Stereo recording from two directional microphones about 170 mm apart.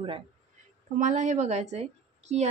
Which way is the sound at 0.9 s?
50° right (ahead or behind).